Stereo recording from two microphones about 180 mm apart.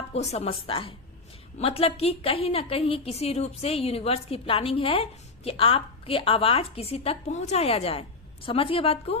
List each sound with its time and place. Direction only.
0.1 s a woman's voice: 35° left (ahead or behind)